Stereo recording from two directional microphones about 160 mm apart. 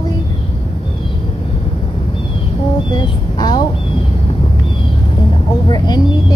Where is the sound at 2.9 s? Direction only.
25° left (ahead or behind).